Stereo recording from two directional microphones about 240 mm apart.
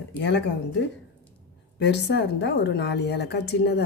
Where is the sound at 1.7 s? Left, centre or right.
Left.